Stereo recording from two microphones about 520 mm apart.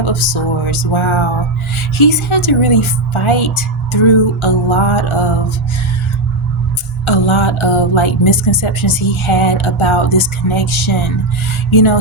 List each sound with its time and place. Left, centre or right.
0.0 s speech: left
7.0 s speech: left